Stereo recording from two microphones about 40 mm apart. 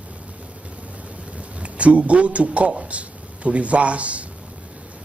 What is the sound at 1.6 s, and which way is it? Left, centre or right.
A man's voice, right.